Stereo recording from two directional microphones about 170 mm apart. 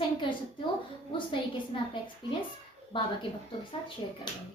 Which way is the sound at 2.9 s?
30° left (ahead or behind).